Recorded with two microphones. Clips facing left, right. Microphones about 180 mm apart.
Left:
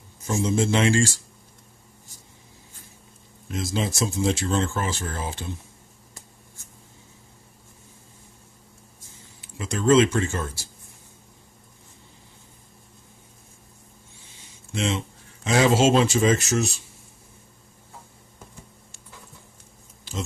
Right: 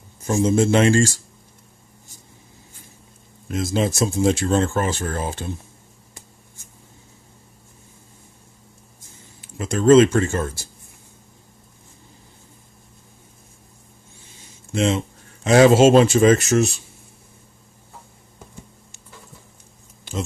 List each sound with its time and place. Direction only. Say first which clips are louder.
0.3 s speech: right 5 dB; 50° right (ahead or behind)
3.4 s speech: right 6 dB; 50° right (ahead or behind)
9.4 s speech: right 5 dB; 45° right (ahead or behind)
14.7 s speech: right 6 dB; 45° right (ahead or behind)